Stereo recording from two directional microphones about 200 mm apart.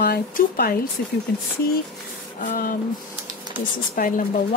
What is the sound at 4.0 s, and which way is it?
Speech, 45° left (ahead or behind).